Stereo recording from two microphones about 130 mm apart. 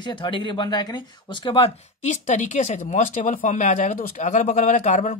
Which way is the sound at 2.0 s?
70° left (ahead or behind).